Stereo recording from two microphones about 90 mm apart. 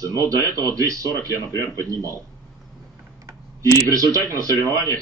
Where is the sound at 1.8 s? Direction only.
40° left (ahead or behind).